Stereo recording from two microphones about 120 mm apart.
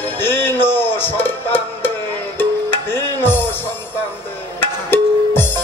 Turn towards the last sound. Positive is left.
turn(degrees=15)  # may be behind; listen again after turning